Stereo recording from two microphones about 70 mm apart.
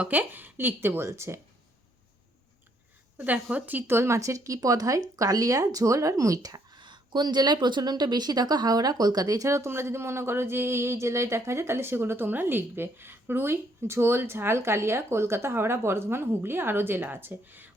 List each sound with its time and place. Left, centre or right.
0.0 s speech: right
3.2 s speech: centre